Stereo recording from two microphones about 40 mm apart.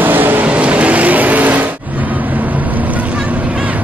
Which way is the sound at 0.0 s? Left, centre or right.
Right.